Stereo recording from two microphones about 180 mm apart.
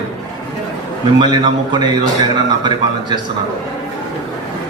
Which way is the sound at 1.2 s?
25° right (ahead or behind).